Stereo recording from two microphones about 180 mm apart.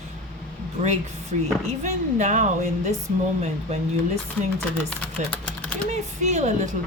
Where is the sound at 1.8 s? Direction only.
40° right (ahead or behind).